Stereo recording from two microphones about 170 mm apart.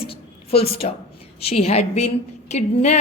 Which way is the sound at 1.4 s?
35° left (ahead or behind).